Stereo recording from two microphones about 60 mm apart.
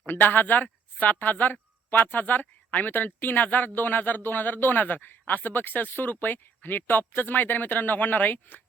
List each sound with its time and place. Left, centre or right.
0.0 s speech: left